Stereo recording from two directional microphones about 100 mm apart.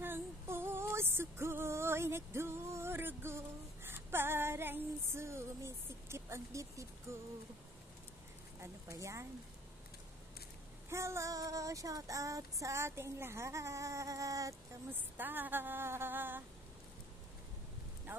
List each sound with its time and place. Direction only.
0.0 s female singing: 25° right (ahead or behind)
8.5 s child singing: 30° right (ahead or behind)
10.9 s child singing: 30° right (ahead or behind)
15.1 s a sound: 20° right (ahead or behind)